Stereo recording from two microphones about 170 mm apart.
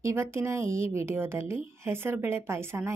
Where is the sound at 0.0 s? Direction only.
15° right (ahead or behind).